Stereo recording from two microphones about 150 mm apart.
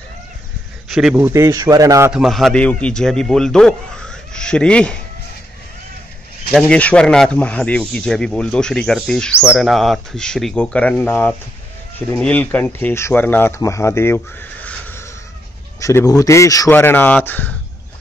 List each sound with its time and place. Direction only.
0.8 s a sound: centre (ahead or behind)
1.1 s speech: 15° right (ahead or behind)
2.1 s speech: centre (ahead or behind)
6.5 s speech: 10° left (ahead or behind)